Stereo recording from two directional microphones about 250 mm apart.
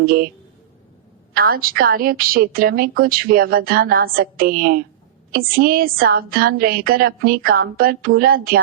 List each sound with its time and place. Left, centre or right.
0.0 s a woman's voice: right
1.3 s a woman's voice: right